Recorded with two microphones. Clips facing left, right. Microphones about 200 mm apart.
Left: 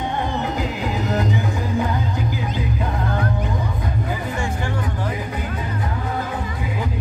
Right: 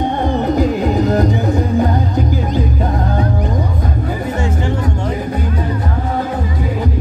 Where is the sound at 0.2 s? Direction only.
40° right (ahead or behind).